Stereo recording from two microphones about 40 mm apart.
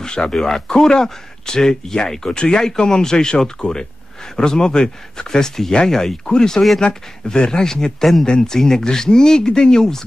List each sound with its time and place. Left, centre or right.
0.0 s speech: left